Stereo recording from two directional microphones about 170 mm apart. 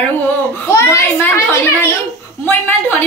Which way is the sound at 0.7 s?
15° left (ahead or behind).